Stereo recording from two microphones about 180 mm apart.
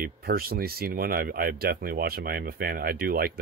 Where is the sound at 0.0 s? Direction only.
55° right (ahead or behind).